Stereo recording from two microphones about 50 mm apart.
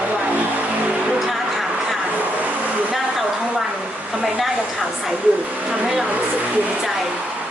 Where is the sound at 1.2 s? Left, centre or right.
Centre.